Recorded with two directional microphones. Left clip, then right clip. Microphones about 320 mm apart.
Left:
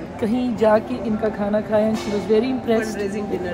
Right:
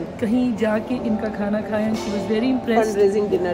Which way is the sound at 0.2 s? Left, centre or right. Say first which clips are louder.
Left 3 dB; centre.